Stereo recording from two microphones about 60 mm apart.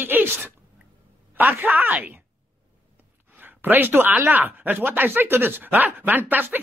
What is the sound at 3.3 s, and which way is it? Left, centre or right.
Speech, right.